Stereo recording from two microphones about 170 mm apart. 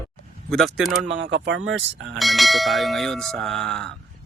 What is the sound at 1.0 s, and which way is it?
Speech, 90° right.